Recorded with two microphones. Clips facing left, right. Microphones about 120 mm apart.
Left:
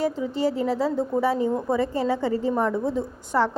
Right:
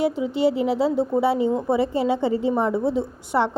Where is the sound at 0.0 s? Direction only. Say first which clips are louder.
Right 3 dB; 15° right (ahead or behind).